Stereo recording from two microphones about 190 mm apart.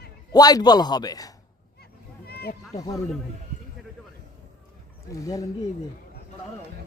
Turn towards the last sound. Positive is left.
turn(degrees=15)  # may be behind; listen again after turning